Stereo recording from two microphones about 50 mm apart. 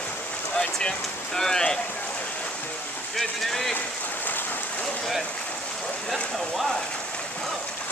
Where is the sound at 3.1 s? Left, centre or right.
Centre.